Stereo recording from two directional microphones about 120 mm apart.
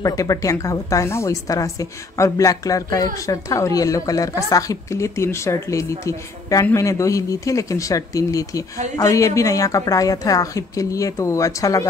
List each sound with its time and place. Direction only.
0.0 s a woman's voice: 30° left (ahead or behind)